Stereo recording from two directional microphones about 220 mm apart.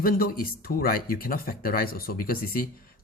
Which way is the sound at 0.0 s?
40° left (ahead or behind).